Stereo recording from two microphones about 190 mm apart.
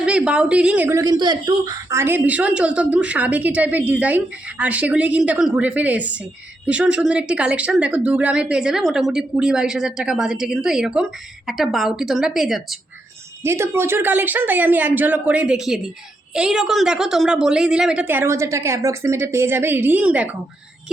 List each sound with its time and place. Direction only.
0.0 s speech: 5° right (ahead or behind)
13.4 s speech: 15° right (ahead or behind)